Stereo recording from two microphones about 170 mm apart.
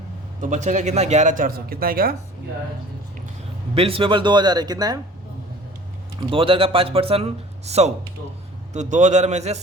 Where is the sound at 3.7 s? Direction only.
35° right (ahead or behind).